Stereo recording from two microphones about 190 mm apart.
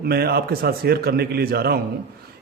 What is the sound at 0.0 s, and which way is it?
A man's voice, 55° right (ahead or behind).